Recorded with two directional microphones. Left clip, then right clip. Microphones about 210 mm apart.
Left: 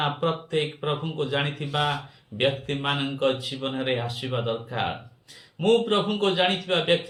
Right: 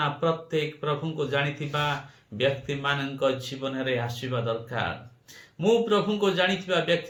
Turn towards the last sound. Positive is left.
turn(degrees=-15)  # may be behind; listen again after turning